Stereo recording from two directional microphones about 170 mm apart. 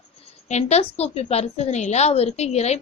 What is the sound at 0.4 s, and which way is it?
A woman's voice, 40° left (ahead or behind).